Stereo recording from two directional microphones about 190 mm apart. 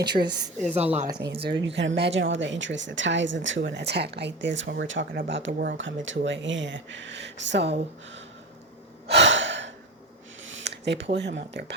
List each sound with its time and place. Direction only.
0.0 s a woman's voice: 60° right (ahead or behind)
0.8 s speech: 35° right (ahead or behind)
1.2 s speech: 60° right (ahead or behind)
9.0 s gasp: 70° right (ahead or behind)
10.4 s speech: 75° right (ahead or behind)